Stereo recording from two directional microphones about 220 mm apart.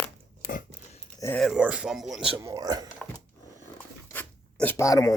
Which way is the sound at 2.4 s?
15° right (ahead or behind).